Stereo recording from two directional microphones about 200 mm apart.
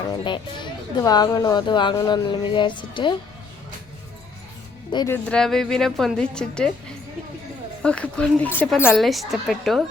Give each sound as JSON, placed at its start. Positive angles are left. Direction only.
{"t": 0.1, "sound": "speech", "side_deg": 20}
{"t": 4.9, "sound": "speech", "side_deg": 20}
{"t": 5.1, "sound": "a woman's voice", "side_deg": 5}
{"t": 7.8, "sound": "a woman's voice", "side_deg": 5}